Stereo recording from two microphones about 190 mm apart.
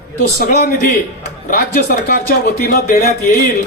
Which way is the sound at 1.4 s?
45° left (ahead or behind).